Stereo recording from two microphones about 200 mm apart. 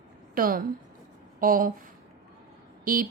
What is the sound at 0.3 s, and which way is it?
A woman's voice, 45° right (ahead or behind).